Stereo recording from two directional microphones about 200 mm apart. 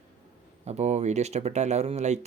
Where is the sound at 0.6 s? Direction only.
35° right (ahead or behind).